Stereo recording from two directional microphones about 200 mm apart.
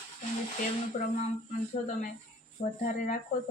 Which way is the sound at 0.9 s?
35° left (ahead or behind).